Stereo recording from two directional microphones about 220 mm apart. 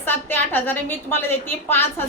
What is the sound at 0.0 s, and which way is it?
A woman's voice, 10° left (ahead or behind).